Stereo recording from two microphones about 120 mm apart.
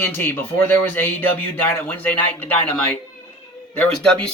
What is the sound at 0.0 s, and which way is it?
Speech, 15° left (ahead or behind).